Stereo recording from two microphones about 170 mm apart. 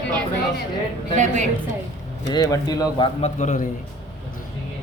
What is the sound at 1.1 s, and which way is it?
Speech, 45° right (ahead or behind).